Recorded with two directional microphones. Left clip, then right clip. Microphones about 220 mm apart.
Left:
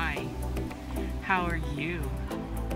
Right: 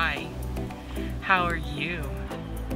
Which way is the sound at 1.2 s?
15° left (ahead or behind).